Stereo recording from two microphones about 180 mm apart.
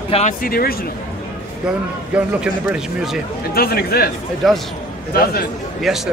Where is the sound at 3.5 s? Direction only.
55° left (ahead or behind).